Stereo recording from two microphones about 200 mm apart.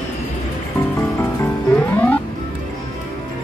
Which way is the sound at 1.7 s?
10° left (ahead or behind).